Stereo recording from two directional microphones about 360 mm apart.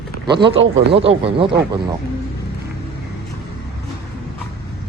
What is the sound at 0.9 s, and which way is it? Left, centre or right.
Speech, centre.